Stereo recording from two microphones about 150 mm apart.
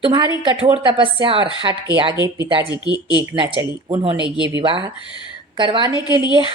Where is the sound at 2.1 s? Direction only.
30° left (ahead or behind).